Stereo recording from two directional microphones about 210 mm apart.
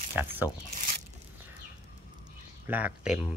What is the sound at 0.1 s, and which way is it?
Speech, 10° right (ahead or behind).